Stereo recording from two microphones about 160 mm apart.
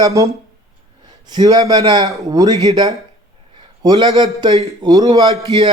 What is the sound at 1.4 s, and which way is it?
A man's voice, 25° right (ahead or behind).